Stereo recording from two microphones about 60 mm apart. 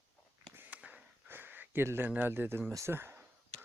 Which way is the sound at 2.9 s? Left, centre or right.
Right.